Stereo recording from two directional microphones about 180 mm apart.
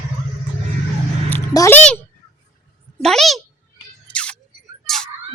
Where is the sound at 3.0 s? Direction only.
5° left (ahead or behind).